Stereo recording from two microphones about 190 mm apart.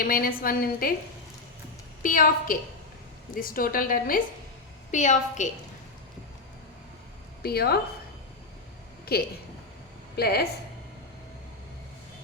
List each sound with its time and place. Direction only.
0.0 s a woman's voice: 50° left (ahead or behind)
2.0 s a woman's voice: 45° left (ahead or behind)
7.4 s a woman's voice: 55° left (ahead or behind)
9.1 s a woman's voice: 55° left (ahead or behind)